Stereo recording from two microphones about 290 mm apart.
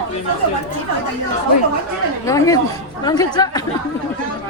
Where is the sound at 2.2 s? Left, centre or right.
Centre.